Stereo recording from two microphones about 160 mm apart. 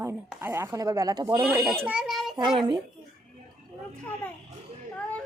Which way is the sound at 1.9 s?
5° right (ahead or behind).